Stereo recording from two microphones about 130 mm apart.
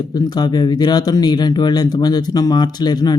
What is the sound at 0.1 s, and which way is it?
Speech, 30° left (ahead or behind).